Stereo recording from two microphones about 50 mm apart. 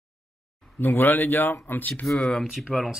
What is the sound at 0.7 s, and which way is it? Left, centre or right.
Speech, left.